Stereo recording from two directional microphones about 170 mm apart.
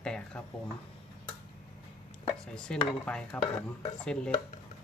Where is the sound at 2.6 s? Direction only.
5° left (ahead or behind).